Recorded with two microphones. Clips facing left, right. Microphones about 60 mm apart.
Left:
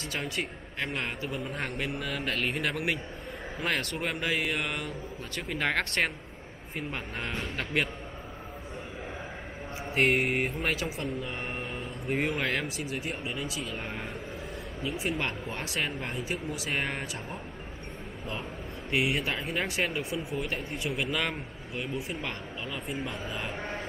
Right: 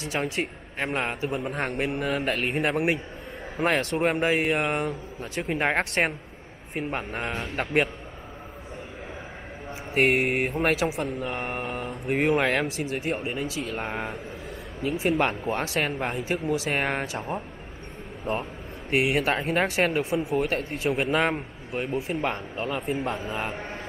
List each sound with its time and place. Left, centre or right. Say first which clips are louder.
0.4 s speech: right 4 dB; right
9.9 s speech: right 4 dB; right
18.3 s speech: right 8 dB; right
20.3 s speech: right 8 dB; right
20.8 s speech: right 8 dB; right